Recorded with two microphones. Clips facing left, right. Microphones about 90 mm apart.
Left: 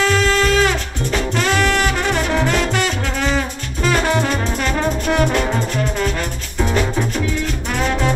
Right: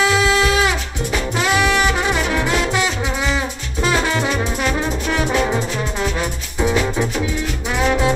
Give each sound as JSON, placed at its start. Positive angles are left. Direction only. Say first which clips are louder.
{"t": 0.0, "sound": "music", "louder": "even", "side_deg": -10}
{"t": 5.0, "sound": "music", "louder": "left 5 dB", "side_deg": 55}
{"t": 5.3, "sound": "music", "louder": "even", "side_deg": -10}